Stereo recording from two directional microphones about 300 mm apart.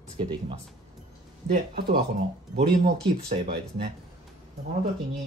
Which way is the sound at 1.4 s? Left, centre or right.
Right.